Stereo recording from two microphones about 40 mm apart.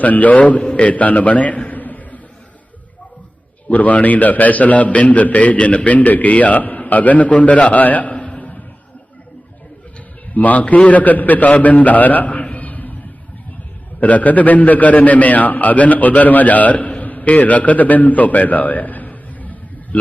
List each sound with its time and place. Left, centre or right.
0.0 s a man's voice: left
0.6 s a man's voice: left
3.7 s a man's voice: left
10.3 s a man's voice: left
14.0 s a man's voice: left